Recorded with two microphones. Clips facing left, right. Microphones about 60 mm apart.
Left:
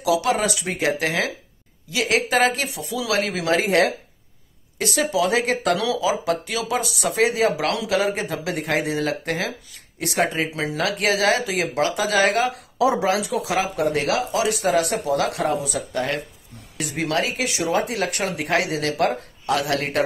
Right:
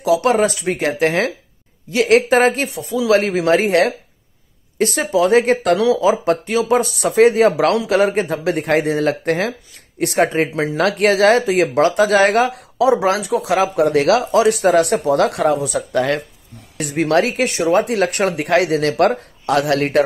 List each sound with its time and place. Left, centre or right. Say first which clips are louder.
0.0 s speech: right 6 dB; right
3.6 s speech: right 4 dB; right
5.8 s speech: right 7 dB; right
10.5 s speech: right 6 dB; right
10.8 s speech: right 7 dB; right
16.7 s speech: right 8 dB; right